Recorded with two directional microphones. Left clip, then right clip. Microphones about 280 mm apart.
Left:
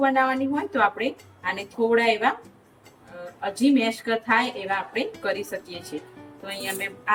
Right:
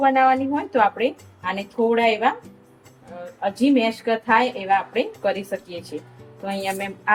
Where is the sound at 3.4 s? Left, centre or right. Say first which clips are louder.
Right 3 dB; centre.